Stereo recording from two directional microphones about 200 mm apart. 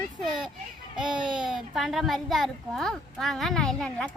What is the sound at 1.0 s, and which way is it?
Speech, 25° right (ahead or behind).